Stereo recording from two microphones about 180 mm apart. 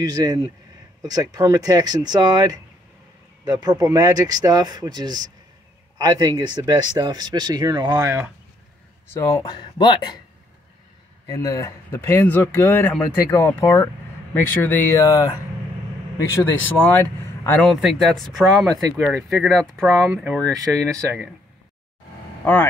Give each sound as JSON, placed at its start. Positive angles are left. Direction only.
{"t": 0.0, "sound": "speech", "side_deg": -20}
{"t": 9.1, "sound": "speech", "side_deg": 15}
{"t": 11.2, "sound": "speech", "side_deg": 20}
{"t": 16.3, "sound": "speech", "side_deg": 10}
{"t": 22.4, "sound": "speech", "side_deg": 10}